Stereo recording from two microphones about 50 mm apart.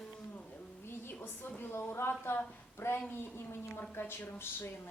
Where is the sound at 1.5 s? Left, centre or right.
Left.